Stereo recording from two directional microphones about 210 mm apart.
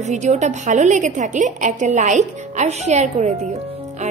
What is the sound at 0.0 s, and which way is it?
A woman's voice, 35° right (ahead or behind).